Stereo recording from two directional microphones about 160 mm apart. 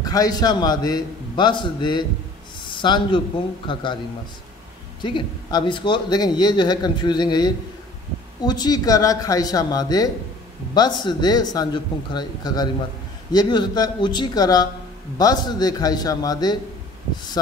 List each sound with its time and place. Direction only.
0.0 s a man's voice: 25° left (ahead or behind)
5.0 s speech: 30° left (ahead or behind)